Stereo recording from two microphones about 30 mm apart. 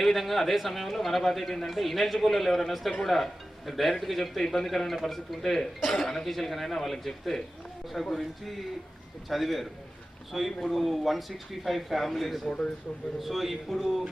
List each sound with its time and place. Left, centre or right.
0.0 s a man's voice: centre
9.3 s a man's voice: centre